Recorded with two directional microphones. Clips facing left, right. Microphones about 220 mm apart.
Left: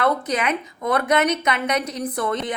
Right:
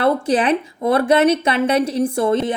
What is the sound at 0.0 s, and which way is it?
Speech, 30° right (ahead or behind).